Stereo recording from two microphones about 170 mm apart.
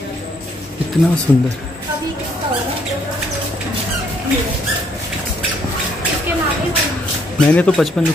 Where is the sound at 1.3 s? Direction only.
20° left (ahead or behind).